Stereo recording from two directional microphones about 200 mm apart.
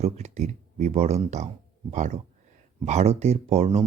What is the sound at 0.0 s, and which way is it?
Speech, 35° right (ahead or behind).